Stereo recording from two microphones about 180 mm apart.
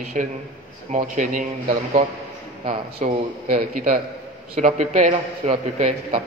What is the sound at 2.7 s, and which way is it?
A man's voice, 45° right (ahead or behind).